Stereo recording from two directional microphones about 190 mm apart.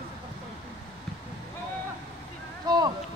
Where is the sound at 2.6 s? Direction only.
20° right (ahead or behind).